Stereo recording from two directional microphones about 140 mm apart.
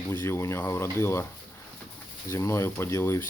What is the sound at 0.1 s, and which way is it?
Speech, 20° left (ahead or behind).